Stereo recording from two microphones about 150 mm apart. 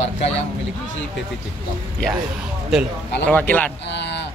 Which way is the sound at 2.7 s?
5° right (ahead or behind).